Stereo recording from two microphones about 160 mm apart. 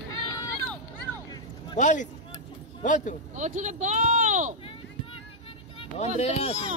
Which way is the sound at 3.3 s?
50° right (ahead or behind).